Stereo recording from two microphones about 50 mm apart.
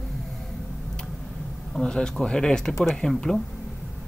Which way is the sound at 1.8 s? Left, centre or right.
Centre.